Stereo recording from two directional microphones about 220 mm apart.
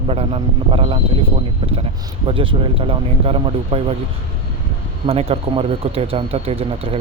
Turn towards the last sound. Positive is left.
turn(degrees=-25)  # may be behind; listen again after turning